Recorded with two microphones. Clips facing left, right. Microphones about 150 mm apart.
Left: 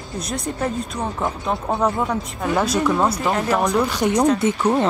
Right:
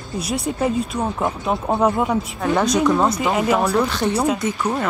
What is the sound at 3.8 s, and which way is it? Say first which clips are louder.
Speech: left 1 dB; 15° left (ahead or behind).